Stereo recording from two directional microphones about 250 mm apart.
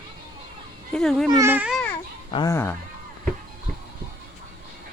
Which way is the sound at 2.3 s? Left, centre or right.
Centre.